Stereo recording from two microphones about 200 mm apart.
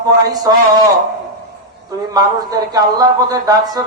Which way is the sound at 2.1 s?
20° right (ahead or behind).